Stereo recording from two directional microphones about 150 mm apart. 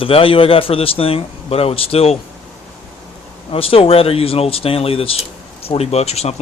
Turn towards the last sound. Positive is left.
turn(degrees=45)  # may be behind; listen again after turning